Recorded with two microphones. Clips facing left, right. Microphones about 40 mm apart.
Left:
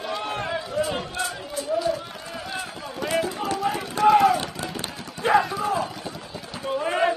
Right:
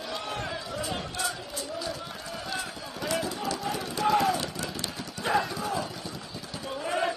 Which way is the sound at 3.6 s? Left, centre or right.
Centre.